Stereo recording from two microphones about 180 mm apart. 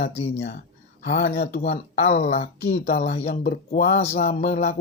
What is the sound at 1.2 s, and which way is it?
Speech, 65° left (ahead or behind).